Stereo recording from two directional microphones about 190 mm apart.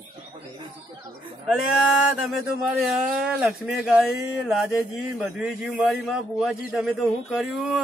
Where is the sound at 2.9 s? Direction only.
Centre (ahead or behind).